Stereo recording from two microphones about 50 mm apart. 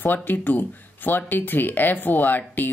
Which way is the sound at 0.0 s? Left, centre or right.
Left.